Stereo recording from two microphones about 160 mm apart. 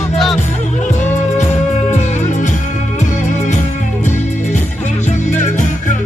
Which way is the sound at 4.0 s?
50° left (ahead or behind).